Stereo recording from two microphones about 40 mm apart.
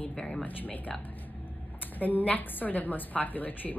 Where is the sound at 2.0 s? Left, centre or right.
Left.